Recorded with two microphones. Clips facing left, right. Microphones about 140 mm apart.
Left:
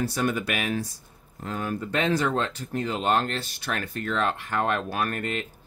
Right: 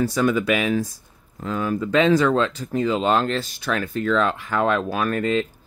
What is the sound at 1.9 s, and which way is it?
Speech, 90° right.